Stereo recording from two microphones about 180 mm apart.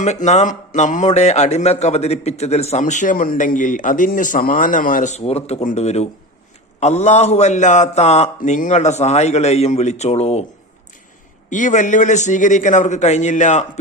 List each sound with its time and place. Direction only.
0.0 s speech: 40° left (ahead or behind)
11.4 s speech: 45° left (ahead or behind)